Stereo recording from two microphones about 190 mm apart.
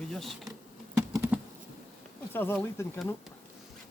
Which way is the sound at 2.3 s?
10° left (ahead or behind).